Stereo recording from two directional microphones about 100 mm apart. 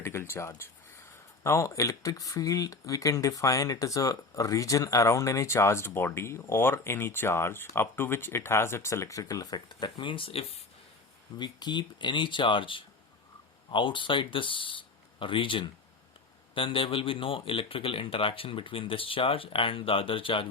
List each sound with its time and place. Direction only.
0.0 s speech: 25° left (ahead or behind); by 10.6 s 75° left (ahead or behind)
11.3 s speech: 50° left (ahead or behind)